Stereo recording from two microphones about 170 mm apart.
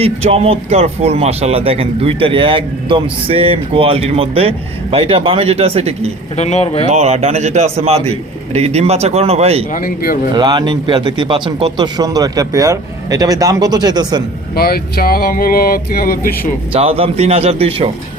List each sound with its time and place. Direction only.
0.0 s speech: 35° right (ahead or behind)
6.3 s speech: 40° left (ahead or behind)
6.8 s speech: 40° right (ahead or behind)
9.7 s a sound: 60° left (ahead or behind)
10.3 s speech: 25° right (ahead or behind)
14.5 s a sound: 65° left (ahead or behind)
16.7 s speech: 35° right (ahead or behind)